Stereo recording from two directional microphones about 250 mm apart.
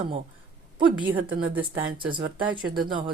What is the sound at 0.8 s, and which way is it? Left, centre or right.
Speech, centre.